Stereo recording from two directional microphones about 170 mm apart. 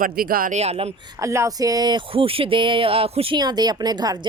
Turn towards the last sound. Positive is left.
turn(degrees=-25)  # may be behind; listen again after turning